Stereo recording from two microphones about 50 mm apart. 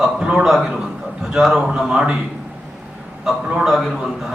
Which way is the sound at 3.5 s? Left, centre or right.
Centre.